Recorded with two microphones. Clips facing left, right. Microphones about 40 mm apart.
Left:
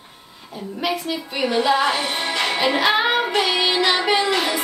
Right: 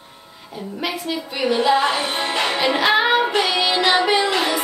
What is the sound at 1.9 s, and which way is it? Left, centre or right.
Music, right.